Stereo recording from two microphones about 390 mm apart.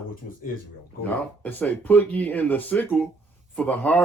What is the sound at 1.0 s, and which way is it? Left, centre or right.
Speech, centre.